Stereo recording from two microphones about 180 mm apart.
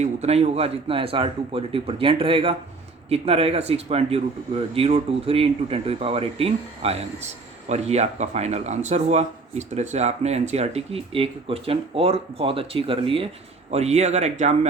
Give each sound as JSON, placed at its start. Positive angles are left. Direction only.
{"t": 0.0, "sound": "speech", "side_deg": -35}